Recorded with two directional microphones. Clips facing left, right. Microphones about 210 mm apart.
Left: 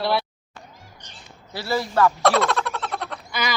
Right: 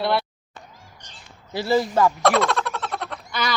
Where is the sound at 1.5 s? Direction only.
20° right (ahead or behind).